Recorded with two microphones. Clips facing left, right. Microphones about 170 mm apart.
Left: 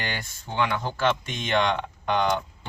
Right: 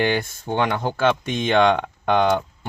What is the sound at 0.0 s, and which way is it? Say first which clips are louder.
Speech: right 12 dB; 55° right (ahead or behind).